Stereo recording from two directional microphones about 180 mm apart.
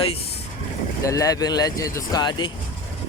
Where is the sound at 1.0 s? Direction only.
20° left (ahead or behind).